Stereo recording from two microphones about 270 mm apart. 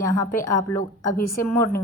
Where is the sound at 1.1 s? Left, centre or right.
Left.